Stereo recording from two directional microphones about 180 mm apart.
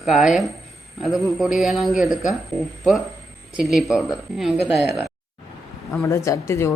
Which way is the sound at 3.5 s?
Centre (ahead or behind).